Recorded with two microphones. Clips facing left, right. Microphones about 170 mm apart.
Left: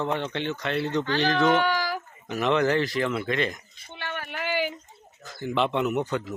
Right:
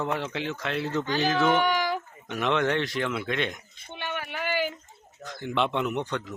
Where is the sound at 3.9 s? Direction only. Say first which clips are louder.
Right 1 dB; 15° right (ahead or behind).